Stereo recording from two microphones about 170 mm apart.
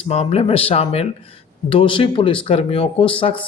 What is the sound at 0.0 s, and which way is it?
A man's voice, 40° left (ahead or behind).